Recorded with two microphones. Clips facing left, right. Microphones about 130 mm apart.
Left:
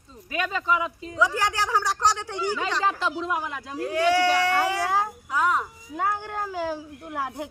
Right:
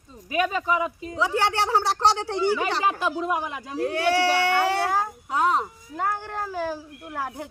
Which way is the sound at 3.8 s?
30° right (ahead or behind).